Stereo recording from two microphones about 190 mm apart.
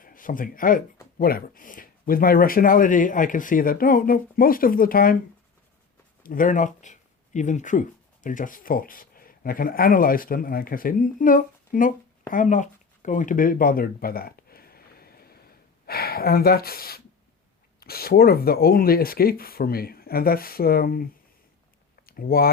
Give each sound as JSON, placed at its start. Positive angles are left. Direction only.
{"t": 0.0, "sound": "speech", "side_deg": 45}
{"t": 6.2, "sound": "speech", "side_deg": 45}
{"t": 12.3, "sound": "a sound", "side_deg": 40}
{"t": 15.9, "sound": "speech", "side_deg": 55}